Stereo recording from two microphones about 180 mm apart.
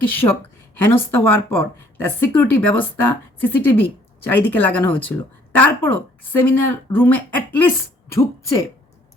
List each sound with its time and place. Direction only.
0.1 s speech: 10° left (ahead or behind)